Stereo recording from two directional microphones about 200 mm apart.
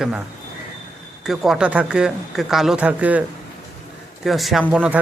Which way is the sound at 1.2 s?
Centre (ahead or behind).